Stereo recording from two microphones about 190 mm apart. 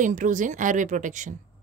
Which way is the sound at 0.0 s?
40° right (ahead or behind).